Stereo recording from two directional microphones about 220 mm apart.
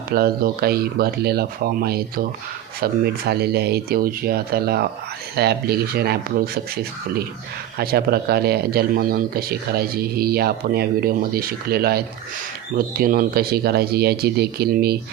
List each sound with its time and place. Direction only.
0.1 s speech: 45° right (ahead or behind)